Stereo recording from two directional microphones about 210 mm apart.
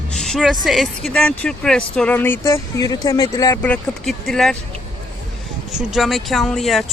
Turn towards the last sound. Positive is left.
turn(degrees=0)  # may be behind; listen again after turning